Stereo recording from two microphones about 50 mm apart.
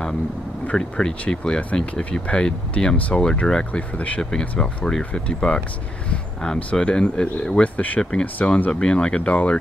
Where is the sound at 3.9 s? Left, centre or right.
Left.